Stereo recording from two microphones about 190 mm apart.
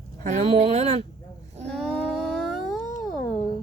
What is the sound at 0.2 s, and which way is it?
Speech, 40° right (ahead or behind).